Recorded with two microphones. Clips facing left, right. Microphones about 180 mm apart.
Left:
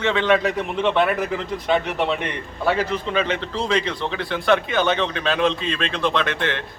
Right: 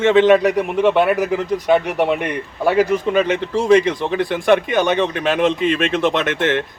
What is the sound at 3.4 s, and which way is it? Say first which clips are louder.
A man's voice: right 9 dB; 15° right (ahead or behind).